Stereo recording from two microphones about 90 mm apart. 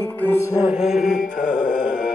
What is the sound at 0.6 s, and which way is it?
Carnatic music, 5° right (ahead or behind).